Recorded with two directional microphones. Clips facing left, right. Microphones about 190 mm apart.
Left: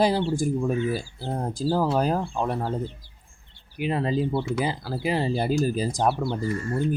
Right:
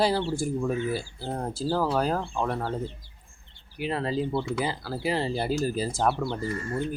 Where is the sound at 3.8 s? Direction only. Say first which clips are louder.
Left 3 dB; 15° left (ahead or behind).